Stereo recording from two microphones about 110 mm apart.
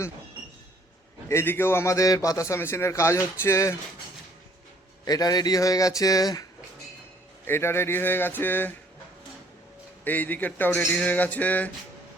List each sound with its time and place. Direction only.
1.3 s a man's voice: 20° left (ahead or behind)
5.0 s a man's voice: 35° left (ahead or behind)
7.4 s a man's voice: 20° left (ahead or behind)
10.0 s a man's voice: 15° left (ahead or behind)